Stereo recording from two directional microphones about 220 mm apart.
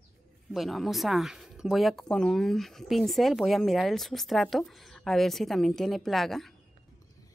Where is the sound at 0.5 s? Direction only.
Centre (ahead or behind).